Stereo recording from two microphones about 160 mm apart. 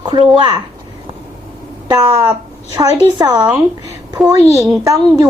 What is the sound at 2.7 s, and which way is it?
A woman's voice, 25° right (ahead or behind).